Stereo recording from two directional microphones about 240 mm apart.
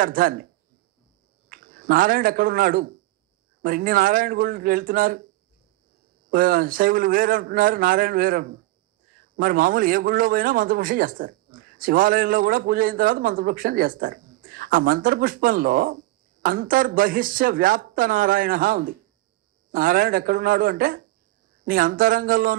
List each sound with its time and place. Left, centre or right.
0.0 s a man's voice: right
1.5 s a man's voice: right
6.3 s a man's voice: right